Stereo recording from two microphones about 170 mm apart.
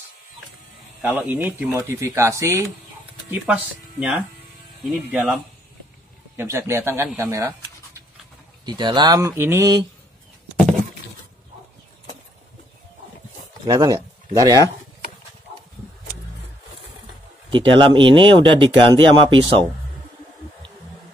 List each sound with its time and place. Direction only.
1.0 s speech: 10° right (ahead or behind)
5.1 s speech: centre (ahead or behind)
6.3 s speech: 15° right (ahead or behind)
7.2 s scratch: 20° right (ahead or behind)
8.6 s speech: 25° right (ahead or behind)
10.6 s a sound: centre (ahead or behind)
13.7 s speech: 20° right (ahead or behind)
17.5 s speech: 30° right (ahead or behind)